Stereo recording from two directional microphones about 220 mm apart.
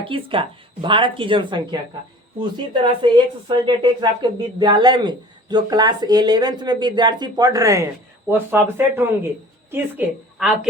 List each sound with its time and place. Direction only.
0.0 s a man's voice: 25° right (ahead or behind); by 10.7 s 5° right (ahead or behind)